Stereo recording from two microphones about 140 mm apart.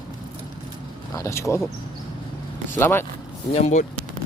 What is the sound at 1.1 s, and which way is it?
Speech, 20° left (ahead or behind).